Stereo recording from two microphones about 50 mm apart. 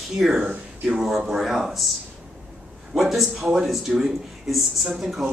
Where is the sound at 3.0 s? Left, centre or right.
Centre.